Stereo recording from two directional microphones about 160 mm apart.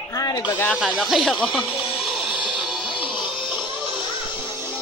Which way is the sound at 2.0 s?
5° right (ahead or behind).